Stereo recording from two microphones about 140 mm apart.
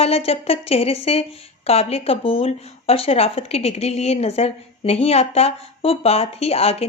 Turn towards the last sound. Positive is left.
turn(degrees=45)  # may be behind; listen again after turning